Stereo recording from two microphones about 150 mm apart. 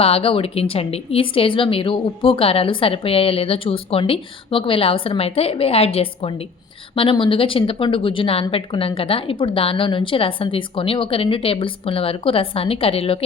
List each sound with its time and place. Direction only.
0.0 s a woman's voice: 40° left (ahead or behind)